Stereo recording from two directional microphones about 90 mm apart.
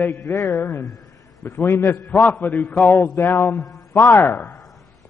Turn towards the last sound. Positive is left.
turn(degrees=20)  # may be behind; listen again after turning